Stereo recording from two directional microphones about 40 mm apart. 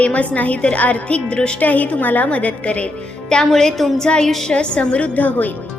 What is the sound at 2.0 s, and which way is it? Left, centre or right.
Speech, left.